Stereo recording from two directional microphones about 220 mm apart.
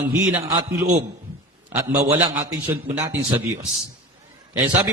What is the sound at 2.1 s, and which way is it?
Speech, 25° right (ahead or behind).